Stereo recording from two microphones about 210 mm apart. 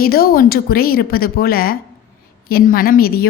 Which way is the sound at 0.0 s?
45° left (ahead or behind).